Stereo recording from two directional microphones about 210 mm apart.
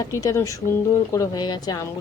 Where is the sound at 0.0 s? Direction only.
15° left (ahead or behind).